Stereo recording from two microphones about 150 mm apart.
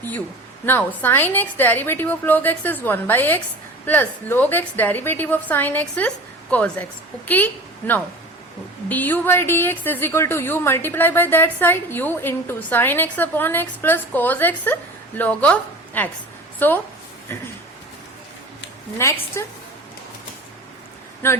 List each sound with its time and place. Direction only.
0.6 s a woman's voice: 15° left (ahead or behind)
19.4 s a woman's voice: 20° left (ahead or behind)
21.2 s a woman's voice: 15° left (ahead or behind)